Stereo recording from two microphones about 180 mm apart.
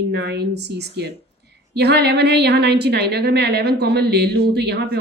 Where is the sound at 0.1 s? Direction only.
65° right (ahead or behind).